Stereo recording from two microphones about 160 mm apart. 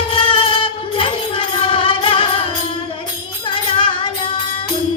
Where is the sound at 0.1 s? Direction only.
35° left (ahead or behind).